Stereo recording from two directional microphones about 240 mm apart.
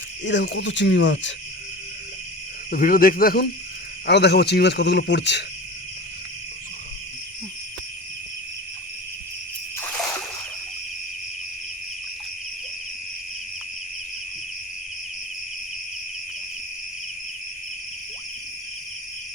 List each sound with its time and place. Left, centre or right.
0.3 s speech: left
2.6 s speech: left